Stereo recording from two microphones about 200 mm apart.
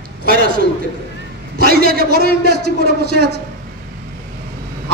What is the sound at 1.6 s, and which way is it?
A man's voice, 50° right (ahead or behind).